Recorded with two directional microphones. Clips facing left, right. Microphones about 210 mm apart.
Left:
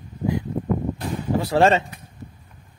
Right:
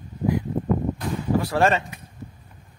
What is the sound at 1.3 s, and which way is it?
Speech, 25° left (ahead or behind).